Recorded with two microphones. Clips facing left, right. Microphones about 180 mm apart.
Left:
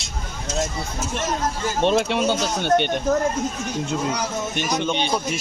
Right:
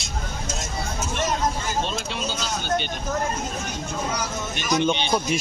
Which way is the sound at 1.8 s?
65° left (ahead or behind).